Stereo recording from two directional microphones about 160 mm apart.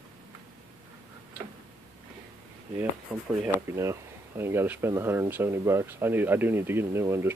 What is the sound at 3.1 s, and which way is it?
Speech, 5° right (ahead or behind).